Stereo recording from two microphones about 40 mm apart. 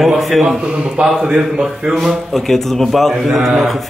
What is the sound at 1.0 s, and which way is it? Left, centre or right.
A man's voice, centre.